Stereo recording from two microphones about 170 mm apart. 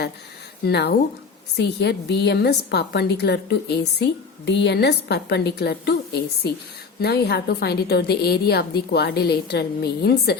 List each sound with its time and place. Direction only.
0.6 s a woman's voice: 75° left (ahead or behind)